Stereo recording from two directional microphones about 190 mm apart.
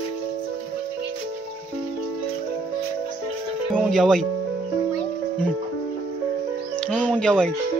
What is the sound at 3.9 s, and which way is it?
Speech, centre (ahead or behind).